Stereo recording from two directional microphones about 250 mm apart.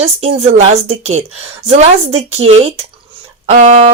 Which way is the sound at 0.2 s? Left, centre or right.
Right.